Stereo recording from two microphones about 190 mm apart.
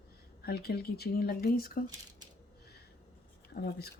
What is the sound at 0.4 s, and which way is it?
Speech, 55° left (ahead or behind).